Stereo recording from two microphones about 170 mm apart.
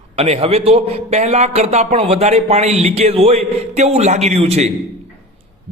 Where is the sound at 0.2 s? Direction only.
35° right (ahead or behind).